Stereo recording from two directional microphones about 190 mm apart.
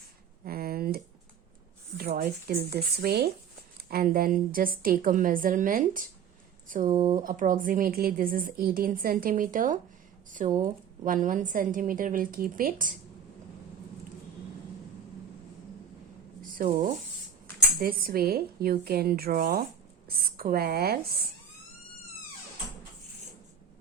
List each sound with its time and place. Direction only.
0.4 s a sound: 55° right (ahead or behind)
2.0 s a woman's voice: 55° right (ahead or behind)
6.8 s speech: 20° right (ahead or behind)
7.2 s a woman's voice: 45° right (ahead or behind)
16.6 s a woman's voice: 50° right (ahead or behind)